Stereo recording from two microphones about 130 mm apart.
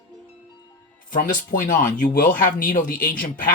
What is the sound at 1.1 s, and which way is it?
Speech, 90° left.